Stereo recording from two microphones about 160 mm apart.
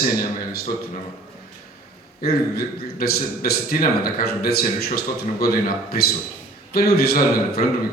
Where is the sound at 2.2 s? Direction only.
70° left (ahead or behind).